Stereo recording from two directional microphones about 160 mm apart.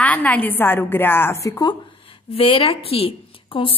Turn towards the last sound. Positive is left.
turn(degrees=35)  # may be behind; listen again after turning